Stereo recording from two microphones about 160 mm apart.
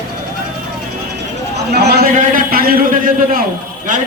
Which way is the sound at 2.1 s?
60° right (ahead or behind).